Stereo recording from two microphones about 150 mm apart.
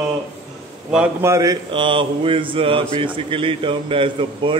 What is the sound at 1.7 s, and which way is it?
A man's voice, 35° right (ahead or behind).